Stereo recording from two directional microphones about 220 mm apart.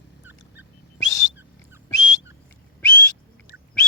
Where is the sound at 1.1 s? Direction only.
15° left (ahead or behind).